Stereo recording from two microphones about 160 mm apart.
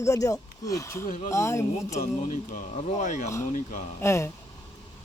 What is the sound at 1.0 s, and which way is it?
Speech, 55° left (ahead or behind).